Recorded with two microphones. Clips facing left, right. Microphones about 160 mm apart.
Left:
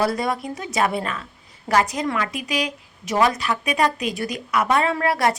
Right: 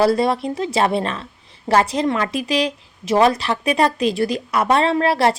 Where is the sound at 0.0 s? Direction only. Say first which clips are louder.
Right 6 dB; 30° right (ahead or behind).